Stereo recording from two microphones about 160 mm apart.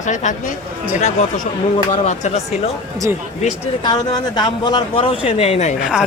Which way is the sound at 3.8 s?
25° left (ahead or behind).